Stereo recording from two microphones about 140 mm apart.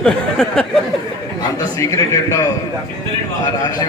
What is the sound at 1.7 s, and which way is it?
Speech, 20° left (ahead or behind).